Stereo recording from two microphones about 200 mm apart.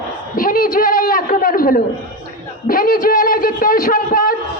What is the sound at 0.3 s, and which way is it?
A man's voice, 45° left (ahead or behind).